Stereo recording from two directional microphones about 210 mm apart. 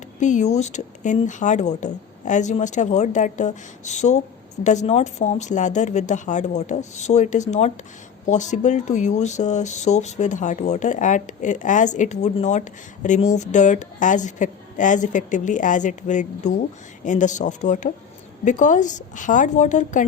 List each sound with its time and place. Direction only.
0.2 s speech: 35° left (ahead or behind)